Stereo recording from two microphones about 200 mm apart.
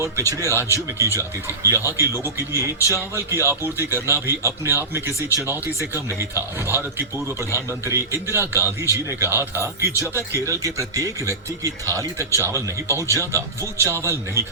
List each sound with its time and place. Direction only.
0.0 s speech: 15° right (ahead or behind)